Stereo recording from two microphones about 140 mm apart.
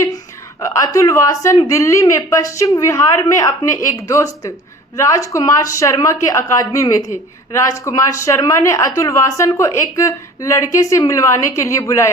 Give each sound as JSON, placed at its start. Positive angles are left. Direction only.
{"t": 0.6, "sound": "speech", "side_deg": 25}